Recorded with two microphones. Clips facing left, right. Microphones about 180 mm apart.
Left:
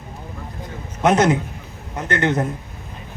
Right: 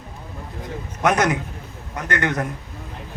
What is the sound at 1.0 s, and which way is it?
Speech, 25° left (ahead or behind).